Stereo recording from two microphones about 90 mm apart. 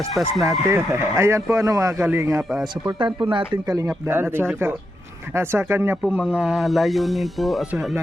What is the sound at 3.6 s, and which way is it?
Speech, 40° right (ahead or behind).